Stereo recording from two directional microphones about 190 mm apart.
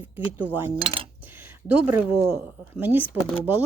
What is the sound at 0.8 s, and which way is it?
Coin, 30° right (ahead or behind).